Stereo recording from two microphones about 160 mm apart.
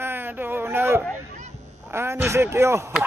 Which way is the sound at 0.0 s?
15° right (ahead or behind).